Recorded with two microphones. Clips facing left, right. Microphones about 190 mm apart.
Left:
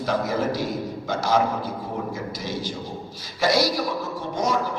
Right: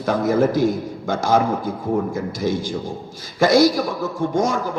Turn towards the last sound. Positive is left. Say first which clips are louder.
# right 5 dB
turn(degrees=-50)  # may be behind; listen again after turning